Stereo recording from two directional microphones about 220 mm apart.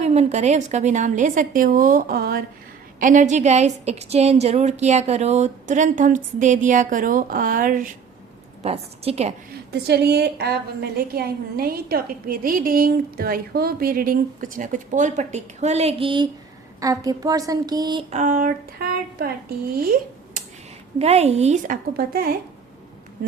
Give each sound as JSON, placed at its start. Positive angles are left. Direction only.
{"t": 0.0, "sound": "a woman's voice", "side_deg": -30}
{"t": 8.6, "sound": "a woman's voice", "side_deg": -30}
{"t": 9.5, "sound": "a woman's voice", "side_deg": -50}
{"t": 18.1, "sound": "a woman's voice", "side_deg": -35}
{"t": 21.0, "sound": "a woman's voice", "side_deg": -30}